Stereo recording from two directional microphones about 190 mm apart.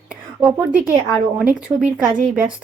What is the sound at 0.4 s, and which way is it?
A woman's voice, 5° right (ahead or behind).